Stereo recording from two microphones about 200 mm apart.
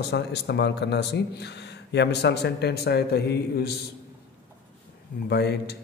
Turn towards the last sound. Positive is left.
turn(degrees=55)  # may be behind; listen again after turning